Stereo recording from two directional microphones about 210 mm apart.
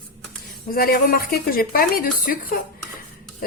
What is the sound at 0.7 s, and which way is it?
A woman's voice, 45° left (ahead or behind).